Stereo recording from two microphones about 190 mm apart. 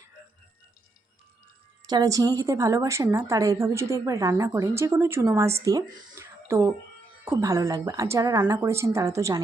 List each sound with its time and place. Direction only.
1.9 s a woman's voice: 20° right (ahead or behind)